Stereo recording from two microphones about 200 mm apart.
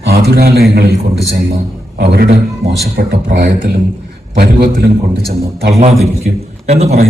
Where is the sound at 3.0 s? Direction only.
40° right (ahead or behind).